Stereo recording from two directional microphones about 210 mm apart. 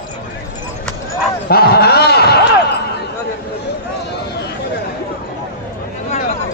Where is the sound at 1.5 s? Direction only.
50° left (ahead or behind).